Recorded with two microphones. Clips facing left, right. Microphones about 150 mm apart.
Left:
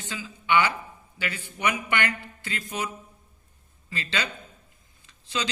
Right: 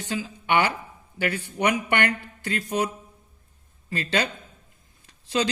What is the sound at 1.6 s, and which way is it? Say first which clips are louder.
Mantra: right 4 dB; 55° right (ahead or behind).